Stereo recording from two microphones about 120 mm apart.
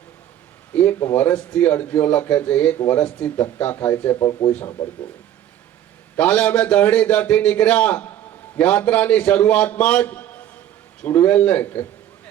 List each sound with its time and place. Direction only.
0.7 s a man's voice: 15° left (ahead or behind)
4.8 s a man's voice: 10° left (ahead or behind)
6.1 s a man's voice: 10° left (ahead or behind)